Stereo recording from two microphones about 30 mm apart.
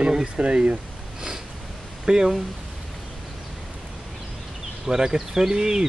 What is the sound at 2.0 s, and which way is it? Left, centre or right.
Speech, right.